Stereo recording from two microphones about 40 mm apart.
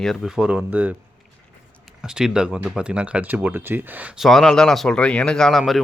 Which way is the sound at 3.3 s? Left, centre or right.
Right.